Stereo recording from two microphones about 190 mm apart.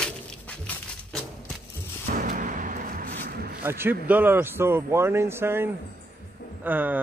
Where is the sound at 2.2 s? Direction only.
45° right (ahead or behind).